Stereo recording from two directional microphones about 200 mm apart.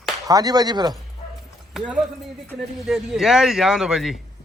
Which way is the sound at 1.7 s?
5° right (ahead or behind).